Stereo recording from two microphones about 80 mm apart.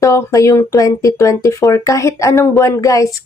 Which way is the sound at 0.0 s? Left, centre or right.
Left.